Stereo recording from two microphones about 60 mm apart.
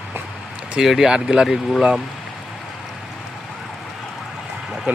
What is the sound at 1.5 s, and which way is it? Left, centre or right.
Speech, centre.